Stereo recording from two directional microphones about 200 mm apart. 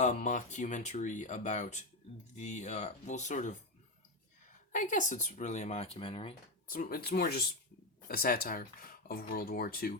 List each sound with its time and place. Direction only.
0.0 s speech: 35° left (ahead or behind)
4.7 s speech: 40° left (ahead or behind)
6.7 s speech: 45° left (ahead or behind)